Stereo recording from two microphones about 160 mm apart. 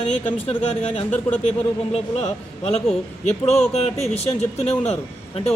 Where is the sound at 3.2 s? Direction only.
45° left (ahead or behind).